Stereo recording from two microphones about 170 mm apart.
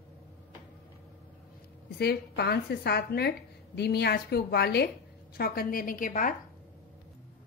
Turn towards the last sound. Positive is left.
turn(degrees=50)  # may be behind; listen again after turning